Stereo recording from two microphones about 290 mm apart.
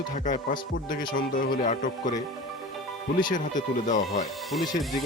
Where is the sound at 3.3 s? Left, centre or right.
Left.